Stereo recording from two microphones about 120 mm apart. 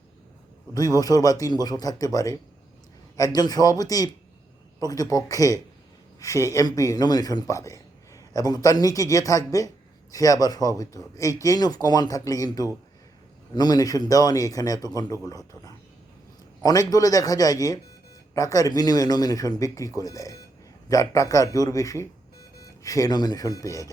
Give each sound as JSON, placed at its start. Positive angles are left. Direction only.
{"t": 0.9, "sound": "a man's voice", "side_deg": 30}
{"t": 16.6, "sound": "a man's voice", "side_deg": 30}